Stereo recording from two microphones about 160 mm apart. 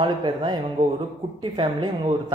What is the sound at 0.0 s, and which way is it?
Speech, 30° right (ahead or behind).